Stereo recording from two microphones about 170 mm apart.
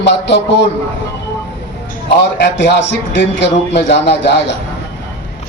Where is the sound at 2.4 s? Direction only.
90° left.